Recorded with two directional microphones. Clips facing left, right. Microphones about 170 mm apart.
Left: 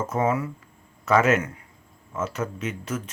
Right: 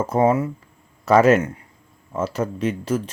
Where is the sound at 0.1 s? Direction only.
30° right (ahead or behind).